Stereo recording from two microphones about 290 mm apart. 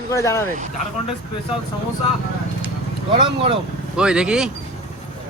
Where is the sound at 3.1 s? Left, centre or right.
Centre.